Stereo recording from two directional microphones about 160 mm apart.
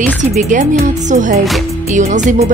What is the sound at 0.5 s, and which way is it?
Speech, 55° right (ahead or behind).